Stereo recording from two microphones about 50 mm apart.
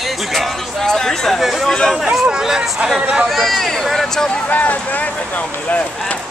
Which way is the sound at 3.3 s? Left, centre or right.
Centre.